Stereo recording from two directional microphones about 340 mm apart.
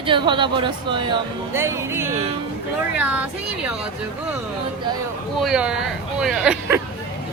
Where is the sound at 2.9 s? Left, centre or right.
Centre.